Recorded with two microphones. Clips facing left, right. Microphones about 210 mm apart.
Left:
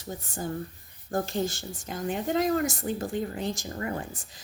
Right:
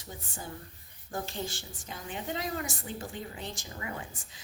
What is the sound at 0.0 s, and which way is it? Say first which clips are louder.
A woman's voice: left 8 dB; 40° left (ahead or behind).